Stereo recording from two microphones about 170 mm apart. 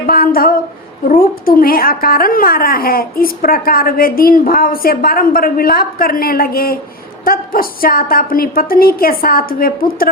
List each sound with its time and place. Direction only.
0.0 s a woman's voice: 55° left (ahead or behind)